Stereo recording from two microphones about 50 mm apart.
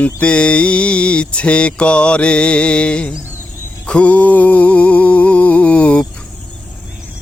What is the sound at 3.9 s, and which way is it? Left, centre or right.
Music, left.